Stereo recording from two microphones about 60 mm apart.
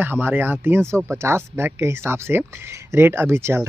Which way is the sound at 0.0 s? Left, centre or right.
Right.